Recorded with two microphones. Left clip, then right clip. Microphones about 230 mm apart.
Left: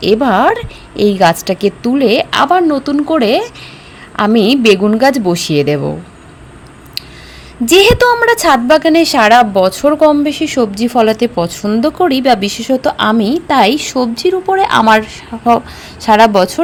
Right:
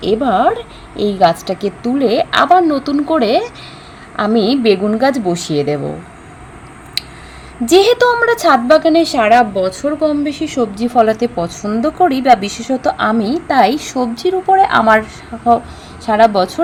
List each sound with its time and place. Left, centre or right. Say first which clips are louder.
0.0 s a woman's voice: left 3 dB; left
7.6 s a woman's voice: left 2 dB; left